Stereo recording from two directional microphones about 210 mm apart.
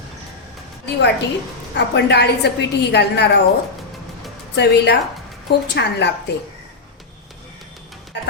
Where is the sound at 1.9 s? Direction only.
50° left (ahead or behind).